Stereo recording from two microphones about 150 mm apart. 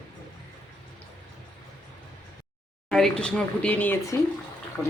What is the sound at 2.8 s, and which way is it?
Speech, 5° left (ahead or behind).